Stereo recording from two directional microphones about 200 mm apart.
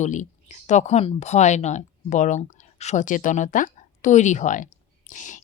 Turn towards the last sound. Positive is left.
turn(degrees=40)  # may be behind; listen again after turning